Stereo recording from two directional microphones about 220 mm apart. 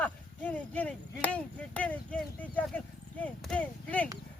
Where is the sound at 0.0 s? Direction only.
5° left (ahead or behind).